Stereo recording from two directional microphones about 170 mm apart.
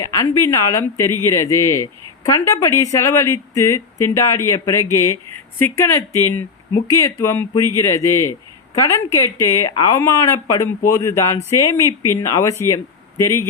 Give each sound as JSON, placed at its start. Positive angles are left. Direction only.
{"t": 0.0, "sound": "a man's voice", "side_deg": 20}